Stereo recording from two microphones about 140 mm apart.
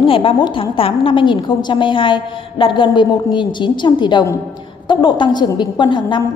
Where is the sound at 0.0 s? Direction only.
40° left (ahead or behind).